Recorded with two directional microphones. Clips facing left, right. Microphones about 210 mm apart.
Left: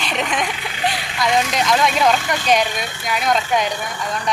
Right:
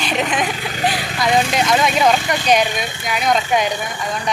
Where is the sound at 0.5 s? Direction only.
40° right (ahead or behind).